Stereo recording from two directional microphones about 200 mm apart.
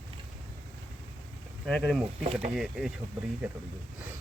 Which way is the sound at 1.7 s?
Centre (ahead or behind).